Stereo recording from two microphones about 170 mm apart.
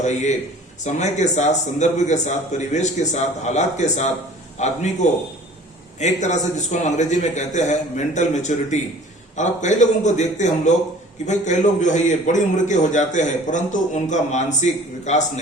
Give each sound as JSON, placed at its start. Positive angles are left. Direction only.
{"t": 0.0, "sound": "a man's voice", "side_deg": 45}